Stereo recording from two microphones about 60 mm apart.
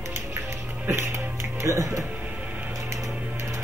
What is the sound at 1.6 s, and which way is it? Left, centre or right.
Speech, right.